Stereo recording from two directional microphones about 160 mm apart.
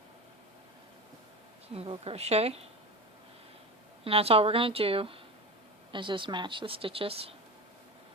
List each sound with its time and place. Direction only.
1.7 s speech: 35° right (ahead or behind)
4.0 s speech: 35° right (ahead or behind)